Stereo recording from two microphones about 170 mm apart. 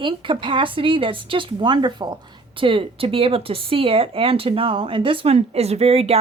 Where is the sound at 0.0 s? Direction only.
30° right (ahead or behind).